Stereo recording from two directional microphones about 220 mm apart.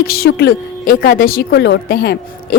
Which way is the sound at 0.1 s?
45° left (ahead or behind).